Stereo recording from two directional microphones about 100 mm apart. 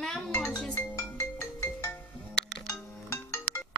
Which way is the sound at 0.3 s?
25° left (ahead or behind).